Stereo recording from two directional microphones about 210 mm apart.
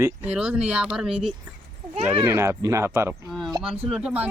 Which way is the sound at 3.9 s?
5° right (ahead or behind).